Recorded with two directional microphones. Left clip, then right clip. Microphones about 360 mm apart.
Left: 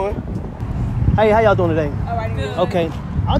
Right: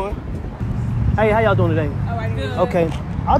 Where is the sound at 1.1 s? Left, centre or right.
Centre.